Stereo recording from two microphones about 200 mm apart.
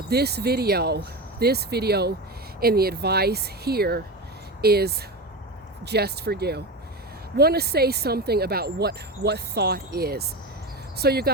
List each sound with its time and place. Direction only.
0.1 s speech: 55° right (ahead or behind)